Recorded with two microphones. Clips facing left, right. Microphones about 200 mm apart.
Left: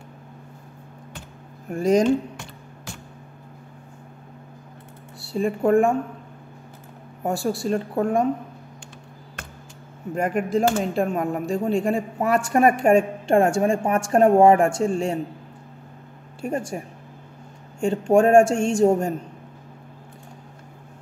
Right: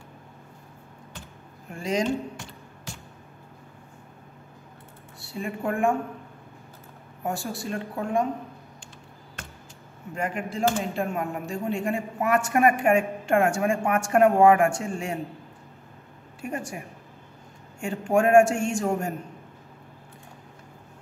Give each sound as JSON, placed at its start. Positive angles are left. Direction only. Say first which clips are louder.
{"t": 1.7, "sound": "speech", "louder": "left 8 dB", "side_deg": 45}
{"t": 5.2, "sound": "speech", "louder": "left 9 dB", "side_deg": 35}
{"t": 7.3, "sound": "speech", "louder": "left 8 dB", "side_deg": 30}
{"t": 10.1, "sound": "speech", "louder": "left 8 dB", "side_deg": 40}
{"t": 16.7, "sound": "a man's voice", "louder": "left 6 dB", "side_deg": 35}